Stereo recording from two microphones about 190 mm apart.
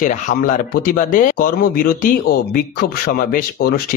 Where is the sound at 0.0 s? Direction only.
45° left (ahead or behind).